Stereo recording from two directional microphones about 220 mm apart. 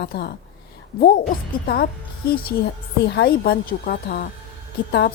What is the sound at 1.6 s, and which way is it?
A woman's voice, 45° left (ahead or behind).